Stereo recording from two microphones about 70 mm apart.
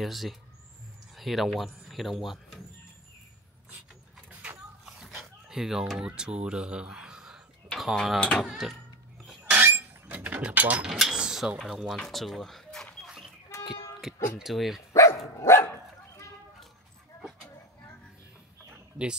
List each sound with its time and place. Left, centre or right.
0.0 s speech: centre
4.3 s a sound: centre
5.0 s speech: centre
7.7 s speech: centre
9.5 s a sound: right
10.9 s speech: centre
13.0 s dog: centre
14.1 s music: centre
14.4 s speech: centre
14.9 s dog: left